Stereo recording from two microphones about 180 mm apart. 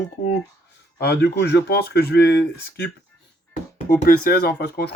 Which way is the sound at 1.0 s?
65° left (ahead or behind).